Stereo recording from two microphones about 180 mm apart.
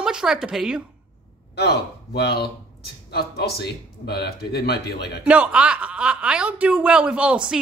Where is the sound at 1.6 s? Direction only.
65° left (ahead or behind).